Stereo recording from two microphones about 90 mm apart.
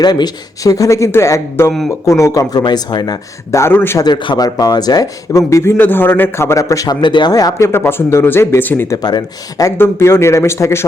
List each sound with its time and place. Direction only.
0.0 s a man's voice: 50° left (ahead or behind)
3.5 s a man's voice: 30° left (ahead or behind)
4.0 s a man's voice: 60° left (ahead or behind)
4.4 s speech: 45° left (ahead or behind)
5.3 s a man's voice: 35° left (ahead or behind)
5.7 s a man's voice: 20° left (ahead or behind); by 6.9 s 40° left (ahead or behind)
7.0 s speech: 55° left (ahead or behind)
7.7 s a man's voice: 25° left (ahead or behind)
8.9 s speech: 45° left (ahead or behind)
9.7 s a man's voice: 25° left (ahead or behind)